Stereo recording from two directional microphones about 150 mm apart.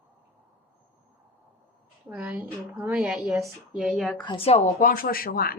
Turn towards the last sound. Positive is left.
turn(degrees=80)